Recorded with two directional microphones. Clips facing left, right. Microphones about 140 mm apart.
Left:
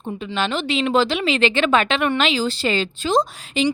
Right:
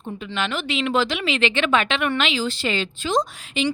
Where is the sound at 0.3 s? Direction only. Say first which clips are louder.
Left 3 dB; 30° left (ahead or behind).